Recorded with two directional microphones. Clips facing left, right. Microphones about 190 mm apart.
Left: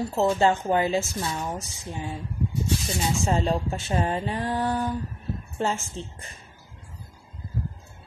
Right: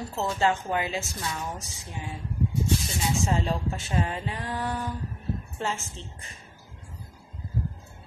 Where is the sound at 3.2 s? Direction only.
35° left (ahead or behind).